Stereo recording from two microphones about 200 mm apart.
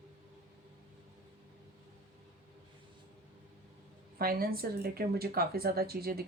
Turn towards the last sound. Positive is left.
turn(degrees=-50)  # may be behind; listen again after turning